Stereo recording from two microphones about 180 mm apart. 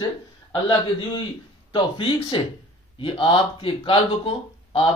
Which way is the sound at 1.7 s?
30° left (ahead or behind).